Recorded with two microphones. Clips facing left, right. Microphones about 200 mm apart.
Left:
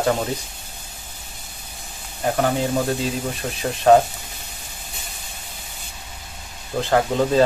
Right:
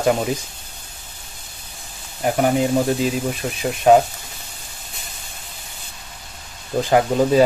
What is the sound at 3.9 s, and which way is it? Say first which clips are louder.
Speech: right 1 dB; 10° right (ahead or behind).